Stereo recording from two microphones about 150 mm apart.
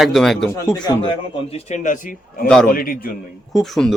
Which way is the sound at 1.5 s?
50° left (ahead or behind).